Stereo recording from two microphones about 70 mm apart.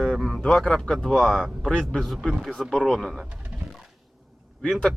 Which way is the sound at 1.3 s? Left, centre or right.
Centre.